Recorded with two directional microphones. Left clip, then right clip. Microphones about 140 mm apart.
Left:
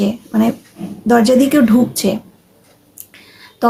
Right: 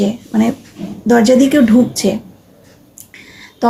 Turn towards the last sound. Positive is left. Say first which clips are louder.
# even
turn(degrees=25)  # may be behind; listen again after turning